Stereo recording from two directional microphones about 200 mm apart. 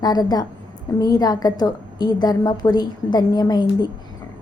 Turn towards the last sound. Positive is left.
turn(degrees=20)  # may be behind; listen again after turning